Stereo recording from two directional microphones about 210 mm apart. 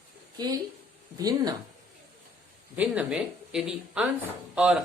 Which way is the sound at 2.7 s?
5° right (ahead or behind).